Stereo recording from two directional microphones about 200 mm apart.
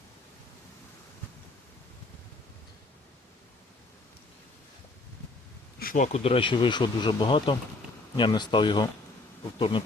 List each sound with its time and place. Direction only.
5.8 s speech: 40° left (ahead or behind); by 9.8 s 25° left (ahead or behind)